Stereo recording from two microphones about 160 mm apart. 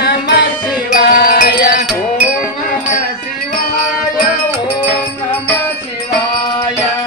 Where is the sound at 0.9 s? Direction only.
70° left (ahead or behind).